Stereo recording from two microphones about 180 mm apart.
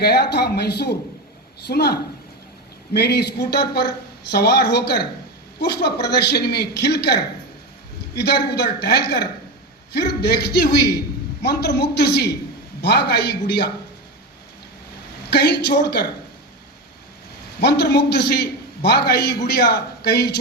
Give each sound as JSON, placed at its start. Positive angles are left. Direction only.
{"t": 0.0, "sound": "a man's voice", "side_deg": 65}
{"t": 15.3, "sound": "a man's voice", "side_deg": 65}
{"t": 17.6, "sound": "a man's voice", "side_deg": 65}